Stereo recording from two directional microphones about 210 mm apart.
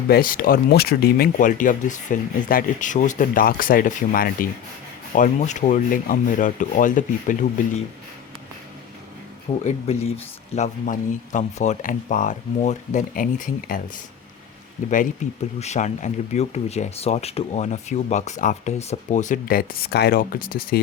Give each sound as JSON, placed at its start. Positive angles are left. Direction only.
{"t": 0.1, "sound": "speech", "side_deg": 45}
{"t": 9.6, "sound": "speech", "side_deg": 30}
{"t": 14.8, "sound": "speech", "side_deg": 35}